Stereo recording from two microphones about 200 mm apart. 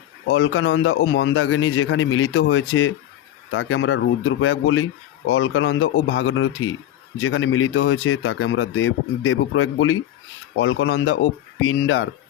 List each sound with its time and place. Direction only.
0.3 s speech: 70° left (ahead or behind); by 2.9 s 90° left
3.5 s speech: 75° left (ahead or behind)